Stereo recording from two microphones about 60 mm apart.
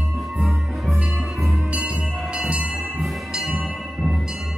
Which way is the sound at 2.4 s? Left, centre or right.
Centre.